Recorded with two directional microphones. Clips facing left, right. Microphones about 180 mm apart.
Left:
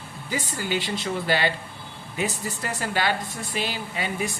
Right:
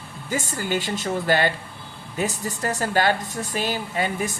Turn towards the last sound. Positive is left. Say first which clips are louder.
# right 3 dB
turn(degrees=-45)  # may be behind; listen again after turning